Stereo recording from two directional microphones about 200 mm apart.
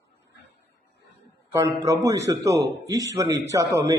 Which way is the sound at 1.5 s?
15° right (ahead or behind).